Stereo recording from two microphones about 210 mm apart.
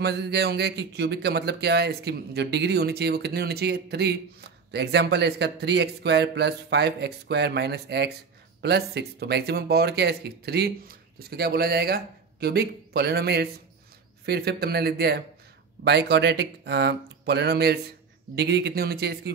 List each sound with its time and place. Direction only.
0.0 s speech: 50° right (ahead or behind)